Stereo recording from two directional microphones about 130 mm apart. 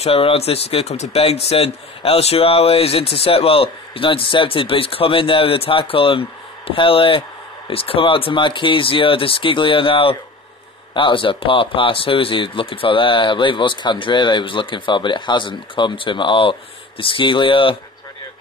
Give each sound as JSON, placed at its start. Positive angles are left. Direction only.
{"t": 0.0, "sound": "speech", "side_deg": 45}